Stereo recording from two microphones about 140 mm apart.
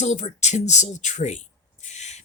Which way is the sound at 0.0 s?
55° left (ahead or behind).